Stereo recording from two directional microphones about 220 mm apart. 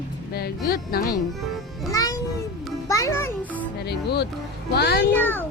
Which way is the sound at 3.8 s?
50° left (ahead or behind).